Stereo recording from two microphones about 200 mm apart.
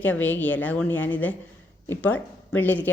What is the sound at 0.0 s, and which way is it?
A woman's voice, 10° left (ahead or behind).